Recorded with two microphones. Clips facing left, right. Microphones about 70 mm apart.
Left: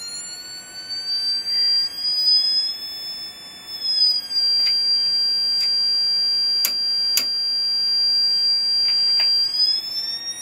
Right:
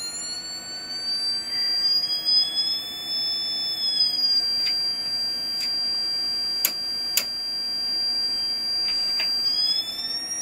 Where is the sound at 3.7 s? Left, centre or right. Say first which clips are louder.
Left 6 dB; centre.